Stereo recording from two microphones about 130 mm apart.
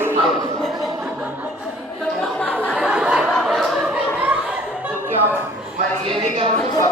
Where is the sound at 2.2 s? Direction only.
10° left (ahead or behind).